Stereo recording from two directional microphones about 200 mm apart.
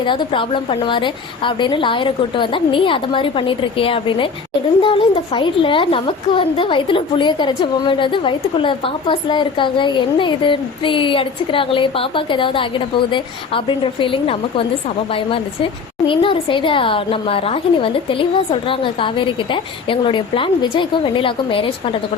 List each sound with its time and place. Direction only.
0.0 s a child's voice: 25° left (ahead or behind)